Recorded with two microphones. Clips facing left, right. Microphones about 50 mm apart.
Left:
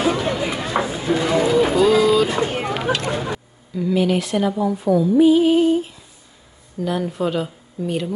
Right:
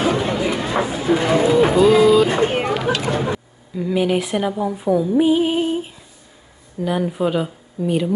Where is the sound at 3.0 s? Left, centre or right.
Centre.